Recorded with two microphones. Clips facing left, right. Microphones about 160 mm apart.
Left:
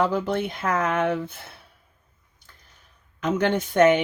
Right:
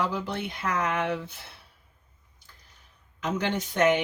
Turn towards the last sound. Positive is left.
turn(degrees=50)  # may be behind; listen again after turning